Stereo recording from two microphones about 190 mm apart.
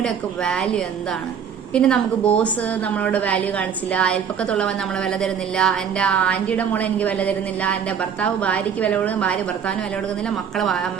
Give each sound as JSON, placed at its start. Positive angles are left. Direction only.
{"t": 0.0, "sound": "a woman's voice", "side_deg": 5}
{"t": 1.7, "sound": "a woman's voice", "side_deg": 5}